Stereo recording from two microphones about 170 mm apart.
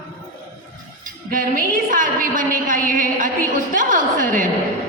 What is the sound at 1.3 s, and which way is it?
A woman's voice, 55° right (ahead or behind).